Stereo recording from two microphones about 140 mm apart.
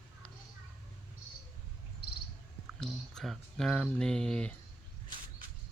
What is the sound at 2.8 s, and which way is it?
Speech, centre (ahead or behind).